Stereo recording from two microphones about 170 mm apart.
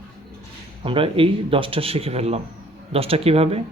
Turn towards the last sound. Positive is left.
turn(degrees=-35)  # may be behind; listen again after turning